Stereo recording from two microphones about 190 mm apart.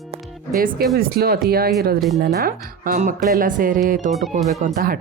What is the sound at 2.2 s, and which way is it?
Speech, 55° right (ahead or behind).